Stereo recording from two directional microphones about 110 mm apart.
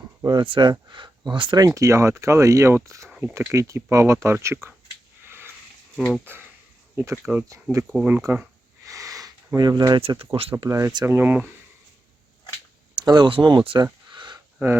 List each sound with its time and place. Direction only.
0.3 s speech: 45° right (ahead or behind); by 4.7 s 25° right (ahead or behind)
5.2 s sniff: 20° right (ahead or behind)
6.3 s speech: 20° right (ahead or behind)
8.8 s sniff: 30° right (ahead or behind)
10.1 s speech: 55° right (ahead or behind)
10.7 s speech: 25° right (ahead or behind)
13.0 s speech: 40° right (ahead or behind)
14.1 s a sound: 45° right (ahead or behind)
14.6 s speech: 25° right (ahead or behind)